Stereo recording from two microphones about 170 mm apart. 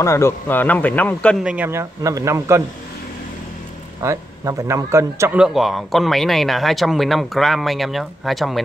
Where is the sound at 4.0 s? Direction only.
15° right (ahead or behind).